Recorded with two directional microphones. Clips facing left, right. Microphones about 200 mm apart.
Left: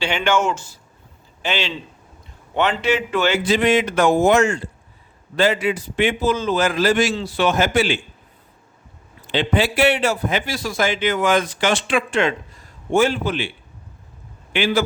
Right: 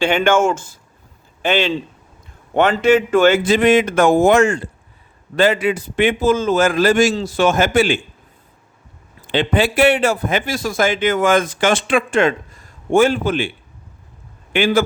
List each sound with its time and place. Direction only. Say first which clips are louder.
0.0 s a man's voice: right 5 dB; 50° right (ahead or behind)
9.2 s a man's voice: right 3 dB; 50° right (ahead or behind)
14.5 s a man's voice: right 4 dB; 50° right (ahead or behind)